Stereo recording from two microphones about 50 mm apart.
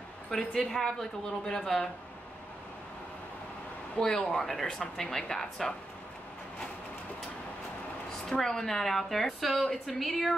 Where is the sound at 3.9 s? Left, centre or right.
Left.